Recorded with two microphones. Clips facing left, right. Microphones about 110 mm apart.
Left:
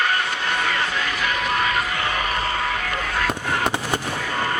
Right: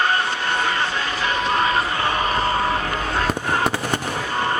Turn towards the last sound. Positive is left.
turn(degrees=-30)  # may be behind; listen again after turning